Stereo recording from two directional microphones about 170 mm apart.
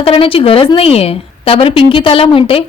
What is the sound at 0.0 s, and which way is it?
A woman's voice, 35° left (ahead or behind).